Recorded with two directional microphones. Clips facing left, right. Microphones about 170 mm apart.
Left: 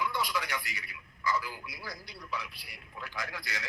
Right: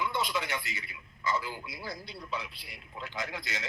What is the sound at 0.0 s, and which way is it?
A man's voice, 25° right (ahead or behind).